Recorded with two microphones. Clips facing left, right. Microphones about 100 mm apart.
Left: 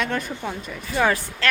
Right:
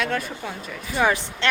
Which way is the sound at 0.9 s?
10° right (ahead or behind).